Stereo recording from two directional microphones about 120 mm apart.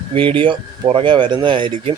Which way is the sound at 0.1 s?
45° right (ahead or behind).